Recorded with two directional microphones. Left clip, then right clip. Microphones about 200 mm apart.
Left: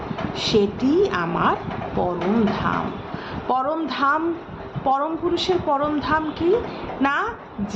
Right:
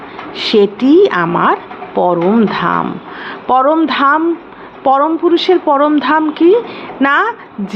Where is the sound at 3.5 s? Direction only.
35° right (ahead or behind).